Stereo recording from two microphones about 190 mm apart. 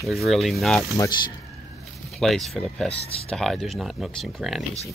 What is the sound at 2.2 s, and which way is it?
Speech, centre (ahead or behind).